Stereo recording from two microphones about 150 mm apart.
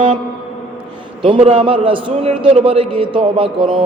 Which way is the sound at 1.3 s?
35° right (ahead or behind).